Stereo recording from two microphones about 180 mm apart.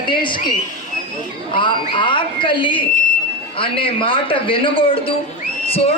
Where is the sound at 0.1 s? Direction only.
25° left (ahead or behind).